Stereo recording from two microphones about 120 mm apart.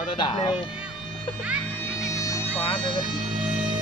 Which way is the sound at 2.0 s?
25° left (ahead or behind).